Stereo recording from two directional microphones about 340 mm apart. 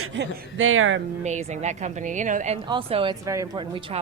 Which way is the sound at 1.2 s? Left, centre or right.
Centre.